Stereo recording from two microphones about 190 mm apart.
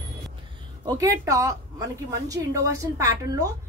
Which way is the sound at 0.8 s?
20° right (ahead or behind).